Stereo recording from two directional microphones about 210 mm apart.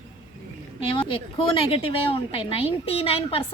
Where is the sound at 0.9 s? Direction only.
25° left (ahead or behind).